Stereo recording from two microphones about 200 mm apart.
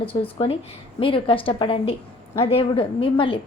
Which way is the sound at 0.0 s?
30° left (ahead or behind).